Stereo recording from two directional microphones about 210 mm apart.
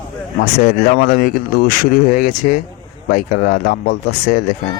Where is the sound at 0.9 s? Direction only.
45° left (ahead or behind).